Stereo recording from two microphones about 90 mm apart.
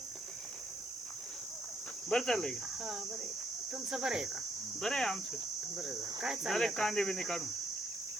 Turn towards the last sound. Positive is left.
turn(degrees=5)  # may be behind; listen again after turning